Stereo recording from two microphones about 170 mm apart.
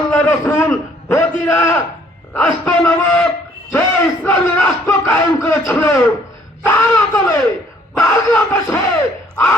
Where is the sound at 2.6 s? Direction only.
10° left (ahead or behind).